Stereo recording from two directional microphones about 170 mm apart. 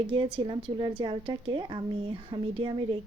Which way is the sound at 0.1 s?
30° right (ahead or behind).